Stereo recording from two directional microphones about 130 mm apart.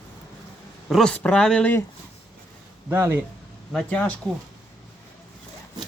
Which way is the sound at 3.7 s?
10° left (ahead or behind).